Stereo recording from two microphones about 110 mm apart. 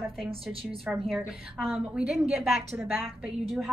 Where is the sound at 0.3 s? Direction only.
55° right (ahead or behind).